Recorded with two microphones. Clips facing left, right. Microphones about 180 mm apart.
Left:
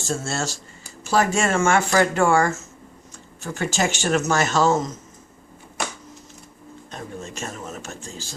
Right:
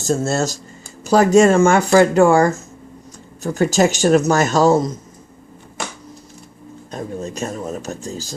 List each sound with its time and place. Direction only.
0.0 s speech: 40° right (ahead or behind)
6.9 s speech: 40° right (ahead or behind)